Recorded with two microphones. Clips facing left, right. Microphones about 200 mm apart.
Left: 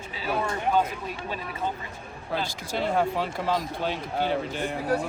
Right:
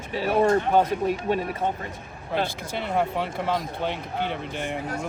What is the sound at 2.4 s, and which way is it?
Speech, 60° right (ahead or behind).